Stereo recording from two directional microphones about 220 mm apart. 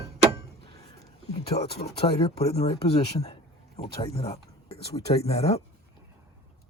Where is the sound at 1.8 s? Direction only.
25° left (ahead or behind).